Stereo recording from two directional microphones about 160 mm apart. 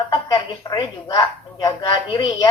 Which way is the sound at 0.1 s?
20° left (ahead or behind).